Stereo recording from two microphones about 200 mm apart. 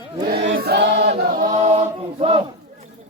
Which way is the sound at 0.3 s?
50° right (ahead or behind).